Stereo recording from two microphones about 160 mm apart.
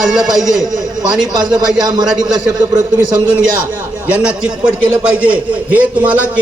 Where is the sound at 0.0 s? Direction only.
Centre (ahead or behind).